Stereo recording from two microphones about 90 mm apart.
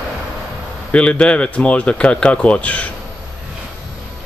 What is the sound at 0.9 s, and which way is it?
Speech, 10° left (ahead or behind).